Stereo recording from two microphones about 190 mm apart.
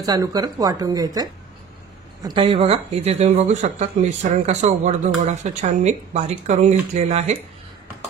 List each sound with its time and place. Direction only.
0.0 s speech: 20° right (ahead or behind); by 7.3 s 35° right (ahead or behind)